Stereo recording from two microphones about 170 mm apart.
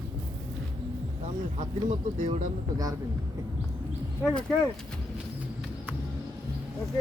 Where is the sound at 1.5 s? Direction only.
40° right (ahead or behind).